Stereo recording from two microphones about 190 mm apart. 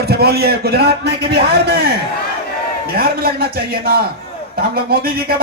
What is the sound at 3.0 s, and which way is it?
A man's voice, 55° right (ahead or behind).